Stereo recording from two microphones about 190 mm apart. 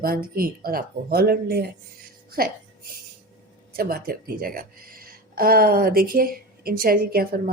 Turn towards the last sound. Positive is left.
turn(degrees=-50)  # may be behind; listen again after turning